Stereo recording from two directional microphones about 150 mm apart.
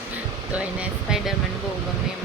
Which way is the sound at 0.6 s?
5° right (ahead or behind).